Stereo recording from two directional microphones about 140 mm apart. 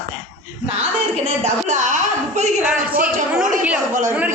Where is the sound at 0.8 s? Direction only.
50° right (ahead or behind).